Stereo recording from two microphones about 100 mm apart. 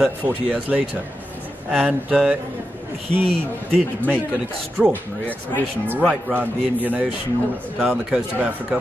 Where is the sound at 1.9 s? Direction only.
10° right (ahead or behind).